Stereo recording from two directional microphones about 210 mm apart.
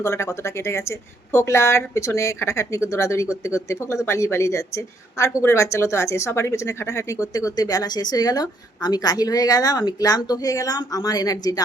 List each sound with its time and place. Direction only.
0.0 s speech: 15° left (ahead or behind)